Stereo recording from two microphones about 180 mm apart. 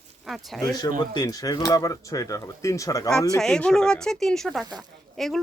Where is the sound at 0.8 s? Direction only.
20° left (ahead or behind).